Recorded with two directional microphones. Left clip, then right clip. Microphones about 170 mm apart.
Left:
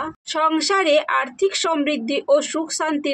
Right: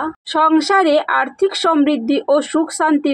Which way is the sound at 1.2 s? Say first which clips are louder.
Right 4 dB; 10° right (ahead or behind).